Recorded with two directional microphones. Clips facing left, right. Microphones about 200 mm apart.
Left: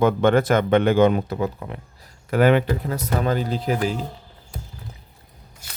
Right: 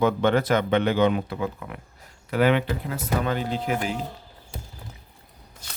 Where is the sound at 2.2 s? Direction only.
45° left (ahead or behind).